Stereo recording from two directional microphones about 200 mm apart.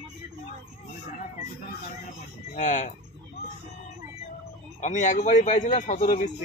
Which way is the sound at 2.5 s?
40° left (ahead or behind).